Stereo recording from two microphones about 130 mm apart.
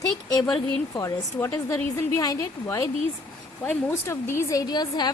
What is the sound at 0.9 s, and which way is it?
A woman's voice, 25° left (ahead or behind).